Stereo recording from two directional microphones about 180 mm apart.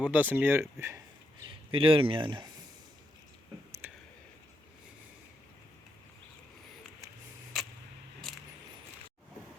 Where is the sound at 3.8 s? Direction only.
10° right (ahead or behind).